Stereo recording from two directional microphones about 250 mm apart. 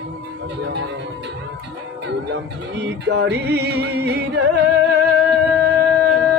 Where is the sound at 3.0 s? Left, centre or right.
Right.